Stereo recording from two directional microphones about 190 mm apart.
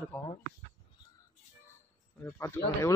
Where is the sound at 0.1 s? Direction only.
10° left (ahead or behind).